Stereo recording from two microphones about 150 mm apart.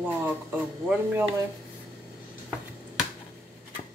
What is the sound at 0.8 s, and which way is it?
Speech, 5° right (ahead or behind).